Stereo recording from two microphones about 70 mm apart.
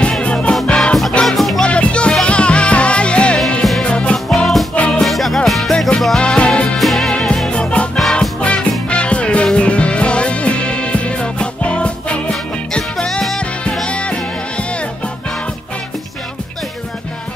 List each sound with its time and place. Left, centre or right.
0.2 s music: centre
0.7 s music: centre
1.6 s music: centre
5.0 s music: centre
6.8 s music: centre
7.4 s music: centre